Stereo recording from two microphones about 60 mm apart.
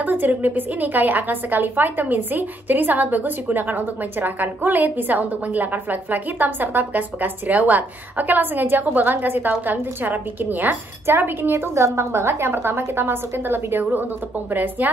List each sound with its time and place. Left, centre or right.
0.0 s a woman's voice: right
11.6 s a woman's voice: right